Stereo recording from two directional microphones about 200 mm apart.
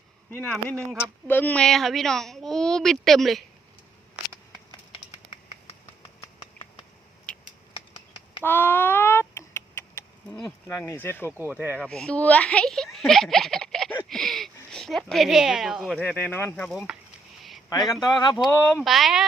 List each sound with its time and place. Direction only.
0.3 s speech: 10° left (ahead or behind)
8.4 s a sound: 10° left (ahead or behind)
11.3 s speech: 10° right (ahead or behind)
11.8 s speech: 5° left (ahead or behind)
16.7 s speech: 5° right (ahead or behind)
17.7 s speech: 20° left (ahead or behind)
18.8 s speech: centre (ahead or behind)